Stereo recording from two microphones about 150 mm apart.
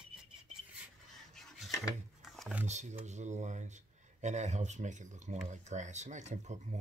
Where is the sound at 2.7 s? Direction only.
50° right (ahead or behind).